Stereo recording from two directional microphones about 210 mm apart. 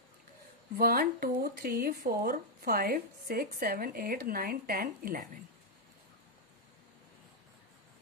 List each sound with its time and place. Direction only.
0.7 s speech: 45° right (ahead or behind)